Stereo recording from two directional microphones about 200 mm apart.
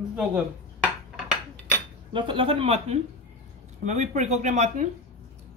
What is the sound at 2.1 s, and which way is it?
Speech, 25° right (ahead or behind).